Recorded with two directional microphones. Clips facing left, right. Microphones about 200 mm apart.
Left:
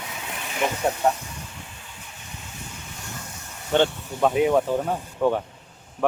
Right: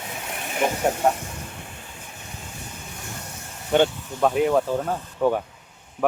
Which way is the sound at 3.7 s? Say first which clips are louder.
Right 1 dB; 10° right (ahead or behind).